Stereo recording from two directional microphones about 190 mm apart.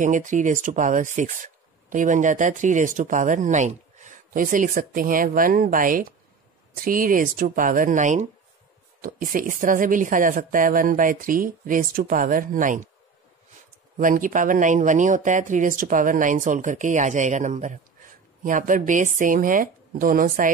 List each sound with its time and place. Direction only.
0.0 s speech: 40° right (ahead or behind)
13.9 s speech: 45° right (ahead or behind)